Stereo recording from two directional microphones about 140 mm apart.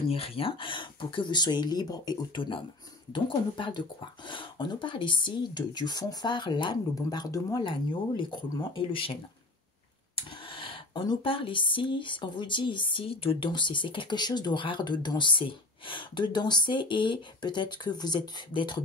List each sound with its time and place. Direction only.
0.1 s speech: 45° left (ahead or behind)
10.5 s speech: 40° left (ahead or behind)